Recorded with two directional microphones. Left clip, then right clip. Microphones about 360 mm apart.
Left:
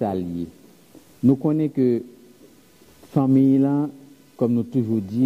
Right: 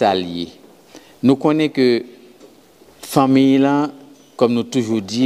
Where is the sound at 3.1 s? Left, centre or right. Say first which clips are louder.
Right 5 dB; centre.